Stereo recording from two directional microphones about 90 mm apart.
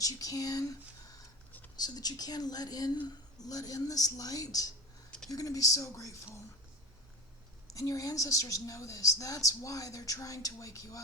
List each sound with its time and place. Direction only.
0.0 s a woman's voice: 40° left (ahead or behind)
7.7 s a woman's voice: 40° left (ahead or behind)